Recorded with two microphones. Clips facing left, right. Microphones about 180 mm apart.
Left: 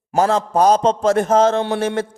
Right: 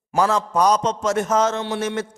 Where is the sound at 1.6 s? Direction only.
55° left (ahead or behind).